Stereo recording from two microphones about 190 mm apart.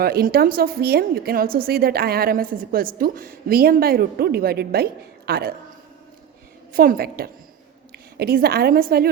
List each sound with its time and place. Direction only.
0.0 s a woman's voice: 55° right (ahead or behind)
6.7 s a woman's voice: 50° right (ahead or behind)